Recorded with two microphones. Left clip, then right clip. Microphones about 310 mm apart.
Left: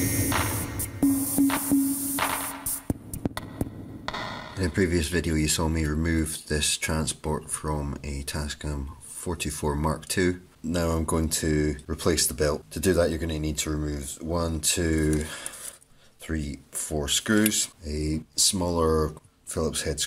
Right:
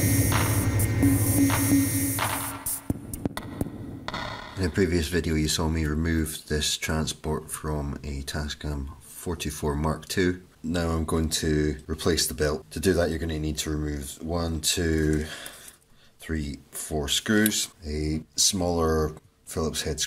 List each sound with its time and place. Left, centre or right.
0.0 s music: centre
9.2 s speech: centre